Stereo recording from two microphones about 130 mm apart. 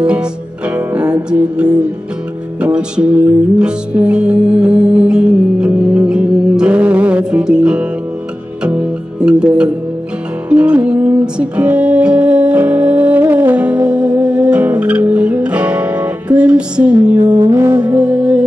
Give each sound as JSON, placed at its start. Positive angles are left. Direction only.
{"t": 0.0, "sound": "music", "side_deg": -10}
{"t": 8.6, "sound": "guitar", "side_deg": -10}
{"t": 10.5, "sound": "music", "side_deg": -10}
{"t": 17.6, "sound": "music", "side_deg": -20}
{"t": 18.0, "sound": "music", "side_deg": -10}